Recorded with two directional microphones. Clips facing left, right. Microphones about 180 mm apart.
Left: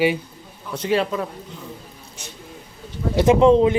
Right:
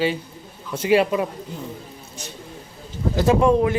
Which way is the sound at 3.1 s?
20° left (ahead or behind).